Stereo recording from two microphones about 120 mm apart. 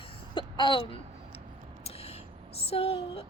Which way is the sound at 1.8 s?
55° left (ahead or behind).